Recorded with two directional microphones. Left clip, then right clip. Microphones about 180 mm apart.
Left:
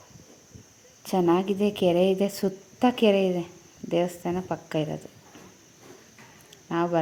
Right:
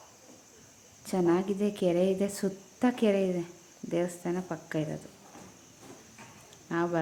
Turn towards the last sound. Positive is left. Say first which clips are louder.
# left 4 dB
turn(degrees=15)  # may be behind; listen again after turning